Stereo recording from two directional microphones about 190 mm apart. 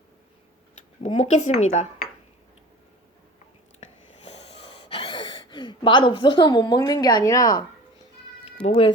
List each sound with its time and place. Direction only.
0.8 s speech: 35° left (ahead or behind)
4.3 s gasp: 30° left (ahead or behind)
8.6 s speech: 25° left (ahead or behind)